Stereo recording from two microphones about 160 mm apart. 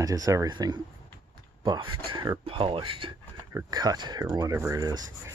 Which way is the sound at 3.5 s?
25° right (ahead or behind).